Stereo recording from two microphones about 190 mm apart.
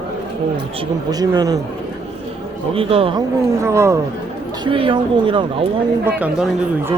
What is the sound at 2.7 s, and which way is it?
Speech, 30° right (ahead or behind).